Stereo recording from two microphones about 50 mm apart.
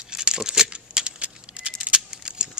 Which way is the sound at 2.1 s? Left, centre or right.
Centre.